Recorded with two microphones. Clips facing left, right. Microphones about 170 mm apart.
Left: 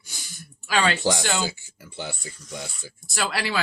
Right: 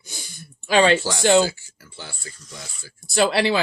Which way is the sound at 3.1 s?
25° right (ahead or behind).